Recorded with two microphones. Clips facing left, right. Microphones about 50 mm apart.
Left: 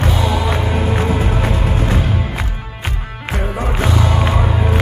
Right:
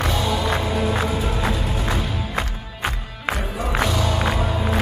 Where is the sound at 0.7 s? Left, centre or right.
Left.